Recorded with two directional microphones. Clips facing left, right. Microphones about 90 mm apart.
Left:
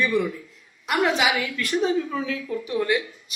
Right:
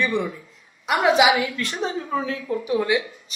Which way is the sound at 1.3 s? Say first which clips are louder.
Right 1 dB; 25° right (ahead or behind).